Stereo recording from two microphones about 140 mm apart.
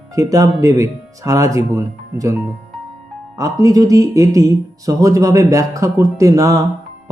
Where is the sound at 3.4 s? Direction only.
25° right (ahead or behind).